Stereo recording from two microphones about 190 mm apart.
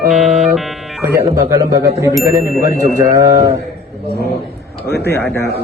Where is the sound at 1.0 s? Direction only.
15° right (ahead or behind).